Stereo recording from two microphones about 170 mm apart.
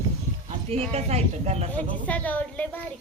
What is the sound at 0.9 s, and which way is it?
Speech, 40° right (ahead or behind).